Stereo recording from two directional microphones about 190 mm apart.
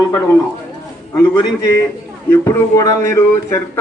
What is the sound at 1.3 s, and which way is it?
Speech, 15° left (ahead or behind).